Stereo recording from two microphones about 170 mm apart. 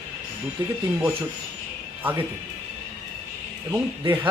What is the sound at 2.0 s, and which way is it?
Speech, 30° right (ahead or behind).